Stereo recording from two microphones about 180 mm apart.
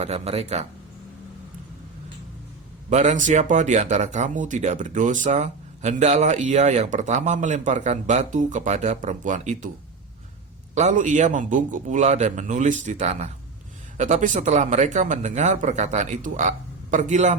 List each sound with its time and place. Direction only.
0.0 s speech: 35° right (ahead or behind)
2.9 s speech: 40° right (ahead or behind)
10.8 s speech: 45° right (ahead or behind)